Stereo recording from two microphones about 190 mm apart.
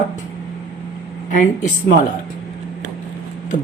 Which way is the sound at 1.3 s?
40° left (ahead or behind).